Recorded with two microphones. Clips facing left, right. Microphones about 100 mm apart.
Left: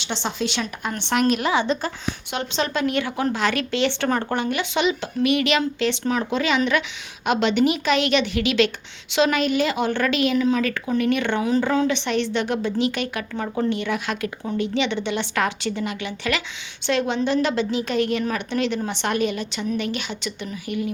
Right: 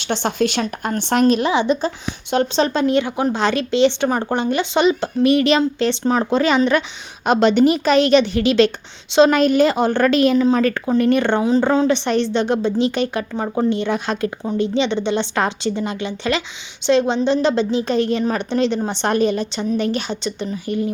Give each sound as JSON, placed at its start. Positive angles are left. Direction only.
{"t": 0.0, "sound": "speech", "side_deg": -50}
{"t": 1.2, "sound": "a woman's voice", "side_deg": -25}
{"t": 2.3, "sound": "a woman's voice", "side_deg": -35}